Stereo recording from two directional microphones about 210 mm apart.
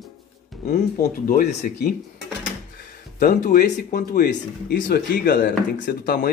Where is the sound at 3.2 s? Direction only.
40° left (ahead or behind).